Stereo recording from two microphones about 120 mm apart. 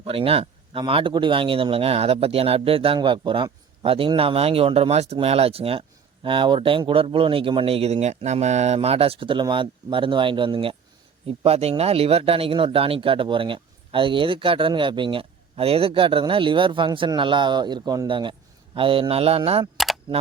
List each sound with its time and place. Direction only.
0.0 s speech: 55° right (ahead or behind)
11.3 s speech: 60° right (ahead or behind); by 18.1 s 35° right (ahead or behind)
18.1 s a man's voice: 45° right (ahead or behind)
19.7 s camera: centre (ahead or behind)